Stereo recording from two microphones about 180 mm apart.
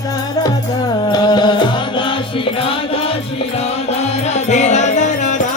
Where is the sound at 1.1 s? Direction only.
25° left (ahead or behind).